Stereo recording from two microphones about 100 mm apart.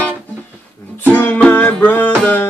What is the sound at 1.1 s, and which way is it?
Music, 15° left (ahead or behind).